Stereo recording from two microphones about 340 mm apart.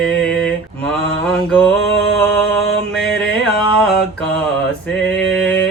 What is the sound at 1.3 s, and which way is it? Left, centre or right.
Music, centre.